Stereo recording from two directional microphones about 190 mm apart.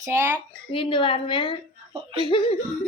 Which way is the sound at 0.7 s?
25° left (ahead or behind).